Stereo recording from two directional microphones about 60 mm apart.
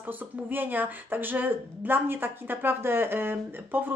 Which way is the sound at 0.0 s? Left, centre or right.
Right.